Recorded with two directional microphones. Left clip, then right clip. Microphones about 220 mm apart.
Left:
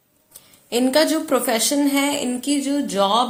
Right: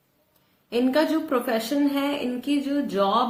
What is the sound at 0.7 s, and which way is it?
A woman's voice, 40° left (ahead or behind).